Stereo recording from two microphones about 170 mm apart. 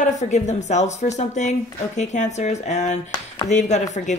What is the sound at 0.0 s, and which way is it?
Speech, 45° left (ahead or behind).